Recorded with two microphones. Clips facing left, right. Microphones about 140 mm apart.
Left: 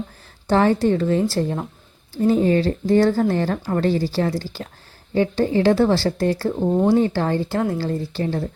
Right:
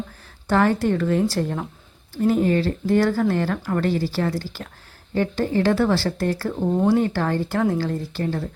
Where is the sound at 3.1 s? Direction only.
25° left (ahead or behind).